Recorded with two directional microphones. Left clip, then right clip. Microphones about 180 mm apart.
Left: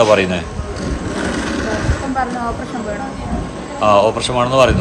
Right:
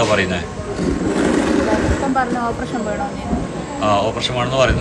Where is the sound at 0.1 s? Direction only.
15° left (ahead or behind).